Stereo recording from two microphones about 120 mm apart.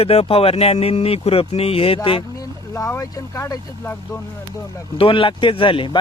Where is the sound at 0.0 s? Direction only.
55° left (ahead or behind).